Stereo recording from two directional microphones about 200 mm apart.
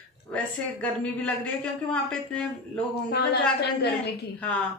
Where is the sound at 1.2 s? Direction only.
5° left (ahead or behind).